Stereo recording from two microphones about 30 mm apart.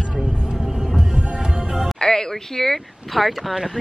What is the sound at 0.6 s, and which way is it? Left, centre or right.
Music, centre.